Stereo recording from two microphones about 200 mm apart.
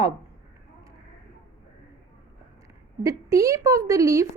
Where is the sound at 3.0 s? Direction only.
15° right (ahead or behind).